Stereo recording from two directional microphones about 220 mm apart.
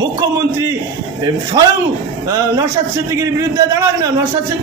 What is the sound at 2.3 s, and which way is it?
A man's voice, 15° right (ahead or behind).